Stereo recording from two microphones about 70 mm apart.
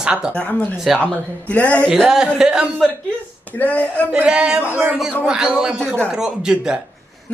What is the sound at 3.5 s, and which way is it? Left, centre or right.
Speech, left.